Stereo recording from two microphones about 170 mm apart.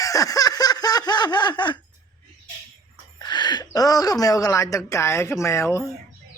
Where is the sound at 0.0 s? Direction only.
20° left (ahead or behind).